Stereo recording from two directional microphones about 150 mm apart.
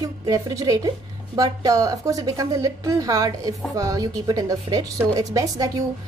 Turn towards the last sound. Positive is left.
turn(degrees=-25)  # may be behind; listen again after turning